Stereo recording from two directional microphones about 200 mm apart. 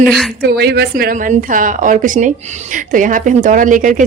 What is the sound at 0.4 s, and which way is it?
Speech, 55° right (ahead or behind).